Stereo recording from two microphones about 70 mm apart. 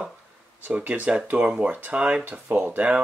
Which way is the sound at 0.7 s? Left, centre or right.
Right.